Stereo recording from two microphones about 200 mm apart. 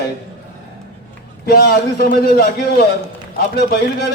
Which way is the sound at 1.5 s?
50° left (ahead or behind).